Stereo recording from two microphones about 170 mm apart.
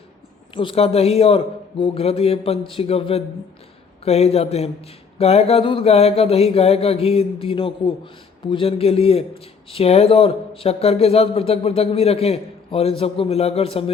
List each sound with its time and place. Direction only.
0.5 s speech: 30° left (ahead or behind)